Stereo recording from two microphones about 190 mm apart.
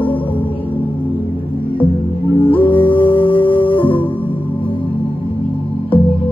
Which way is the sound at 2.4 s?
25° left (ahead or behind).